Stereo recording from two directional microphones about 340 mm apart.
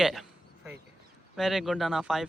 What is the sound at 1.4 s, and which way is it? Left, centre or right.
Speech, centre.